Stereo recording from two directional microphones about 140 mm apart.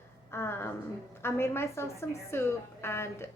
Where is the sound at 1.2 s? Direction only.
20° left (ahead or behind).